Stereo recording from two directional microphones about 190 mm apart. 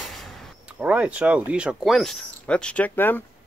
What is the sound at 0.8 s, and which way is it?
Speech, 5° right (ahead or behind).